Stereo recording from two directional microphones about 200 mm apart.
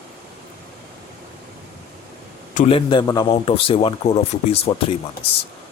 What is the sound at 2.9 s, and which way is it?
Speech, 20° left (ahead or behind).